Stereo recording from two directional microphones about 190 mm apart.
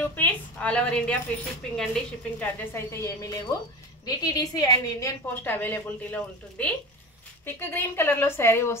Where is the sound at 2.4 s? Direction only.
10° left (ahead or behind).